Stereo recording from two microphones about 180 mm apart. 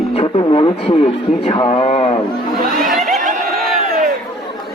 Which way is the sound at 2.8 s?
Centre (ahead or behind).